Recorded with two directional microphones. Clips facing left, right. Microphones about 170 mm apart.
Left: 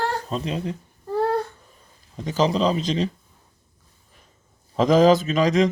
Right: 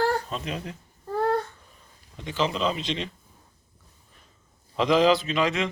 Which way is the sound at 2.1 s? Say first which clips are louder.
Left 6 dB; 40° left (ahead or behind).